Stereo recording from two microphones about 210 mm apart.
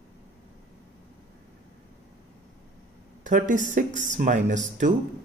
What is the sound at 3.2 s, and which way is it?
Speech, 35° right (ahead or behind).